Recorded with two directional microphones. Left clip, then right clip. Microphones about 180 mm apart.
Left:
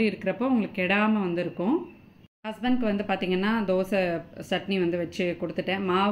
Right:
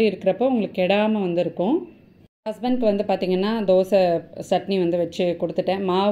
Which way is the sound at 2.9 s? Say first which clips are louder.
Right 6 dB; 15° right (ahead or behind).